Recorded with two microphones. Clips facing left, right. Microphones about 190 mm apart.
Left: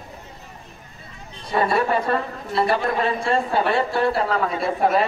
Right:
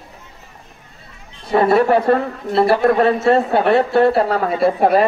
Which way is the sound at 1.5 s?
55° right (ahead or behind).